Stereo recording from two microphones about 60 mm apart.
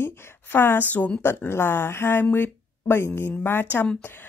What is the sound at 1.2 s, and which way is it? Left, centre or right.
Speech, left.